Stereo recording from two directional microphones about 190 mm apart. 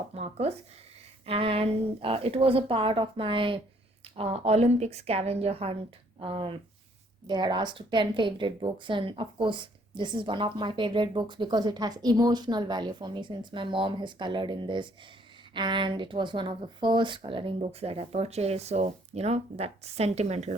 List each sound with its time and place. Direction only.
0.1 s a woman's voice: 30° right (ahead or behind)